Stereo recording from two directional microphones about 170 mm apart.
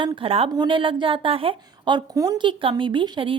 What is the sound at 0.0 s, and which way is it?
A woman's voice, 35° right (ahead or behind).